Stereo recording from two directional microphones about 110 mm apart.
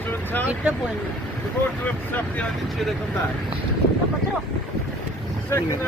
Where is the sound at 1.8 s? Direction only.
15° left (ahead or behind).